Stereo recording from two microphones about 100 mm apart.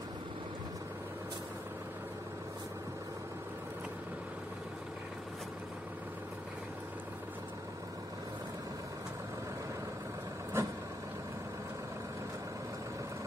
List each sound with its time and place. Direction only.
10.6 s vehicle: 25° right (ahead or behind)